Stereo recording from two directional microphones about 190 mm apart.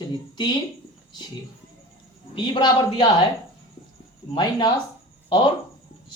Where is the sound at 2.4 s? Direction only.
25° left (ahead or behind).